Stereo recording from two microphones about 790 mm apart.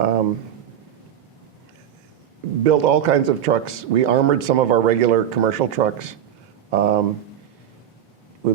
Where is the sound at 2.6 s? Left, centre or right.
Right.